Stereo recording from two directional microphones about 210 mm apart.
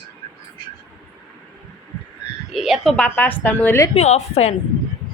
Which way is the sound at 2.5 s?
Centre (ahead or behind).